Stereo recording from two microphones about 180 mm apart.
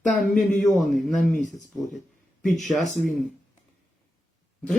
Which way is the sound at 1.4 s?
45° left (ahead or behind).